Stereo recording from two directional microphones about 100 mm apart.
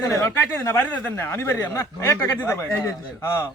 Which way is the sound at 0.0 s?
30° left (ahead or behind).